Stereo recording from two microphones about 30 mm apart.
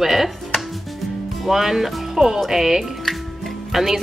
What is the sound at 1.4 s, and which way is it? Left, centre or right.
A woman's voice, centre.